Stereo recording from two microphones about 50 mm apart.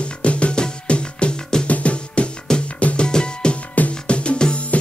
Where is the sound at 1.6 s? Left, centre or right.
Left.